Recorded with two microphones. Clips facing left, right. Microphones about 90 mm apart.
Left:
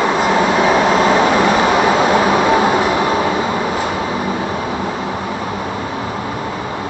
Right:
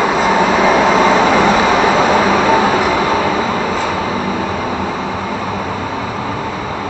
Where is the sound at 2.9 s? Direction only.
25° left (ahead or behind).